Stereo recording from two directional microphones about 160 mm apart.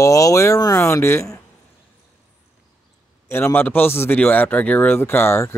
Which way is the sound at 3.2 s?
15° left (ahead or behind).